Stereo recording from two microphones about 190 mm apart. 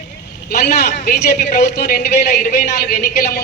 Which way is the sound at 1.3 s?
45° left (ahead or behind).